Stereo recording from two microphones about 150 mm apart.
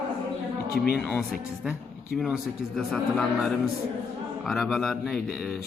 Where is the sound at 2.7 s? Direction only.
5° left (ahead or behind).